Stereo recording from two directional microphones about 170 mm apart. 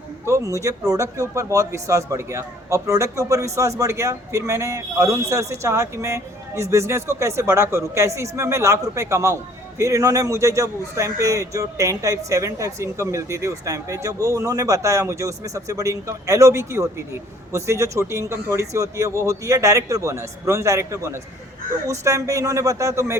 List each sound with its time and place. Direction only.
0.3 s a man's voice: 15° right (ahead or behind)